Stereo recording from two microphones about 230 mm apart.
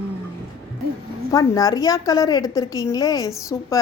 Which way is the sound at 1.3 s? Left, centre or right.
Centre.